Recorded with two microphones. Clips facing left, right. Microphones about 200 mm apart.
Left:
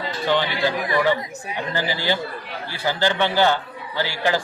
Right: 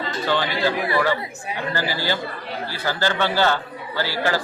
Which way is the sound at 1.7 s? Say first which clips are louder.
Left 2 dB; 15° left (ahead or behind).